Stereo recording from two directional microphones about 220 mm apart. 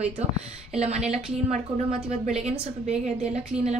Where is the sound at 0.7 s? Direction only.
30° right (ahead or behind).